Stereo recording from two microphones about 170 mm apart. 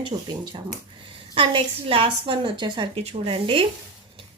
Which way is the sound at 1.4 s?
35° right (ahead or behind).